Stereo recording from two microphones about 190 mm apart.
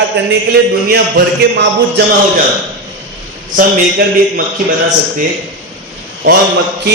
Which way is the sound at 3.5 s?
45° right (ahead or behind).